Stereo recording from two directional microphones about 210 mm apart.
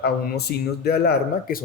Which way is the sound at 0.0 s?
50° left (ahead or behind).